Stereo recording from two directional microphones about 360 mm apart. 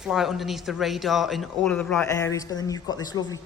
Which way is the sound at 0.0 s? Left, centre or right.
Centre.